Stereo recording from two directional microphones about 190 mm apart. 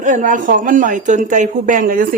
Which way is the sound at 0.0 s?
40° right (ahead or behind).